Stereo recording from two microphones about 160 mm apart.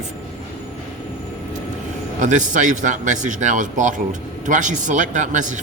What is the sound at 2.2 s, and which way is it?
Speech, 50° right (ahead or behind).